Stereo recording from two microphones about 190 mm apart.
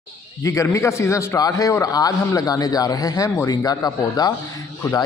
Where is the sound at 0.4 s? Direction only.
15° left (ahead or behind).